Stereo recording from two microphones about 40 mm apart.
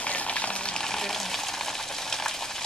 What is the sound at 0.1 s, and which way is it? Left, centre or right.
Frying, left.